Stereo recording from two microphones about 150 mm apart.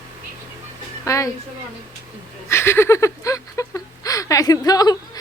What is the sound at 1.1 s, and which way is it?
Speech, 20° left (ahead or behind).